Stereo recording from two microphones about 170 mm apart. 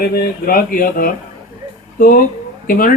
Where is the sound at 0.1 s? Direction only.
60° left (ahead or behind).